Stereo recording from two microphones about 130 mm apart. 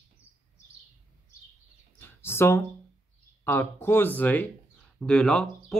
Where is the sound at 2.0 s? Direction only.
20° left (ahead or behind).